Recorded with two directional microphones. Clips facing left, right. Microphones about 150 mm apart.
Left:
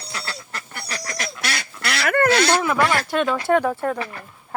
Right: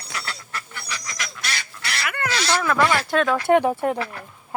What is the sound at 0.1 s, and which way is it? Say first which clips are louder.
Duck: even; 30° left (ahead or behind).